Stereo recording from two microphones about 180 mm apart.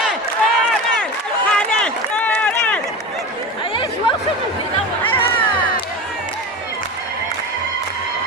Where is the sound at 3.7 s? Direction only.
30° left (ahead or behind).